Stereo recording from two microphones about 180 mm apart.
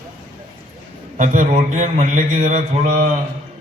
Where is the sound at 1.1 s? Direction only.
45° right (ahead or behind).